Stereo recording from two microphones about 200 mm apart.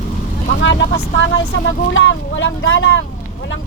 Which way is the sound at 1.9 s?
70° left (ahead or behind).